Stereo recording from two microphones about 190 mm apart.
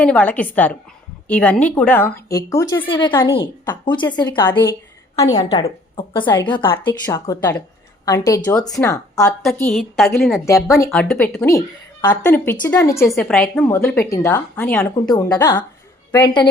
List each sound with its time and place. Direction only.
0.0 s a woman's voice: 5° left (ahead or behind)
9.4 s a woman's voice: 5° left (ahead or behind)
10.4 s a woman's voice: 15° left (ahead or behind)
10.9 s a woman's voice: 5° left (ahead or behind); by 16.5 s 20° left (ahead or behind)